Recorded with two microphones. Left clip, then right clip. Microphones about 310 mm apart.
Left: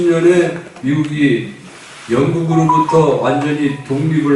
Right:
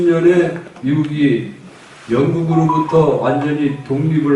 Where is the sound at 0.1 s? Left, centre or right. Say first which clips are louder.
Left 2 dB; centre.